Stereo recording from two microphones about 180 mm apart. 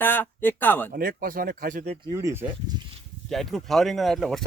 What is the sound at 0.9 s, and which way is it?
Speech, 50° right (ahead or behind).